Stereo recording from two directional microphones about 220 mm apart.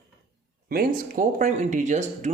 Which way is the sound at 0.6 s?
40° right (ahead or behind).